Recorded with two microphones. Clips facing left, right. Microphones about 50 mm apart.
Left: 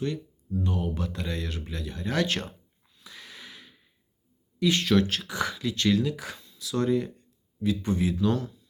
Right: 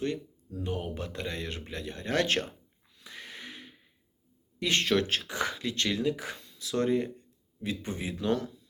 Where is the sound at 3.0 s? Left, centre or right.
Right.